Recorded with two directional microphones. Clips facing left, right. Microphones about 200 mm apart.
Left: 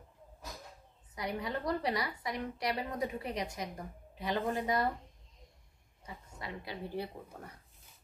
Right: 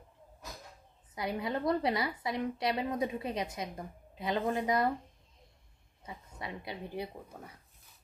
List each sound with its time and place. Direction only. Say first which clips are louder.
1.1 s a woman's voice: right 3 dB; 25° right (ahead or behind)
6.0 s a woman's voice: right 2 dB; 20° right (ahead or behind)